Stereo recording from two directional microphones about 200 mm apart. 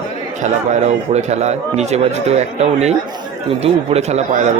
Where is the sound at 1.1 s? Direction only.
35° right (ahead or behind).